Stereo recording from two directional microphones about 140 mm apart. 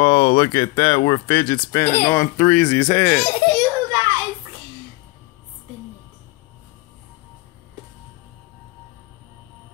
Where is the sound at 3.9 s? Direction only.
35° right (ahead or behind).